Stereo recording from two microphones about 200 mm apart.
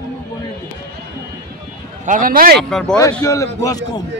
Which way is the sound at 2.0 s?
40° right (ahead or behind).